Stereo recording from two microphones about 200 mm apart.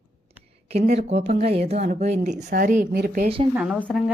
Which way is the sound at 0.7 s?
30° right (ahead or behind).